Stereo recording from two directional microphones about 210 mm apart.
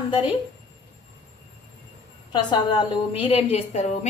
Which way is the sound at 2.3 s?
20° left (ahead or behind).